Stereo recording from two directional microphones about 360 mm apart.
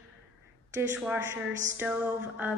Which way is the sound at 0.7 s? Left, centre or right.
Centre.